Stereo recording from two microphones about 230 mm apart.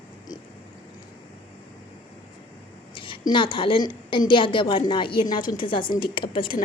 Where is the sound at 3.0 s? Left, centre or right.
Left.